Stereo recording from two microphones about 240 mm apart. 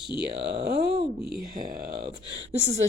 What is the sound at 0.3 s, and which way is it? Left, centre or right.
Speech, right.